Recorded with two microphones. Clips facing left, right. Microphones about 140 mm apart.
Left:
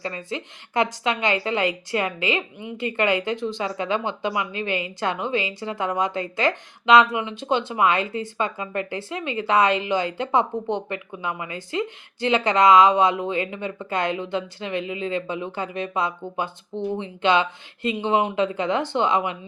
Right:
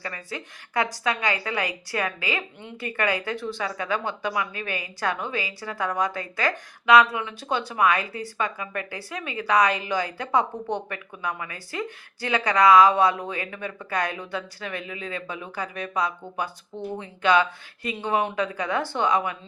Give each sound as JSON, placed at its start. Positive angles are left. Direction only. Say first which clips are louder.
{"t": 0.0, "sound": "speech", "louder": "left 5 dB", "side_deg": 25}
{"t": 2.6, "sound": "a woman's voice", "louder": "left 6 dB", "side_deg": 10}
{"t": 2.8, "sound": "speech", "louder": "left 4 dB", "side_deg": 20}